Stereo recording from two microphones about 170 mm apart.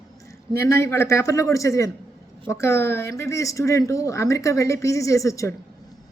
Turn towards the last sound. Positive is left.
turn(degrees=20)  # may be behind; listen again after turning